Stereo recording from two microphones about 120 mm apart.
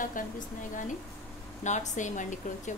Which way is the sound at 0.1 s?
90° left.